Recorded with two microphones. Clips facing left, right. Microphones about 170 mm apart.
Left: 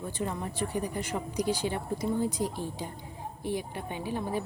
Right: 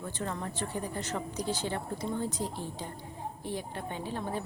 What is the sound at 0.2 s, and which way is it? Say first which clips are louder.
A woman's voice: left 3 dB; 15° left (ahead or behind).